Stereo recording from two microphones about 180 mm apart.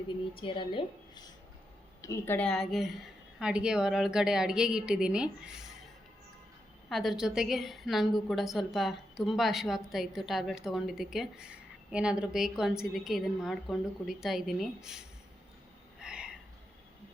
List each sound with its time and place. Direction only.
0.3 s a woman's voice: 30° left (ahead or behind)
2.0 s a woman's voice: 15° left (ahead or behind); by 5.7 s 5° right (ahead or behind)
6.9 s a woman's voice: centre (ahead or behind)
16.0 s a sound: 5° right (ahead or behind)